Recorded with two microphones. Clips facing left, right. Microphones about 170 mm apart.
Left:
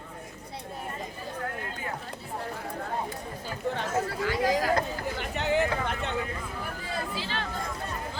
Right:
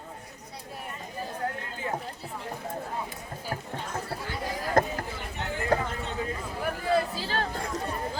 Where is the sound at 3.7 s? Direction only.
90° left.